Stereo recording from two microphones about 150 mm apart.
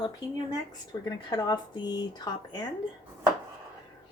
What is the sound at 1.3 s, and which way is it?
Speech, 25° left (ahead or behind).